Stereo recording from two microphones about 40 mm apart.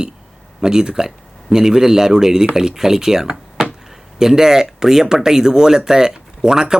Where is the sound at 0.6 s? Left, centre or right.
Centre.